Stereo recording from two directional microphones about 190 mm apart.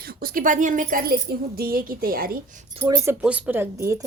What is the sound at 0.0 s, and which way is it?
Speech, 50° right (ahead or behind).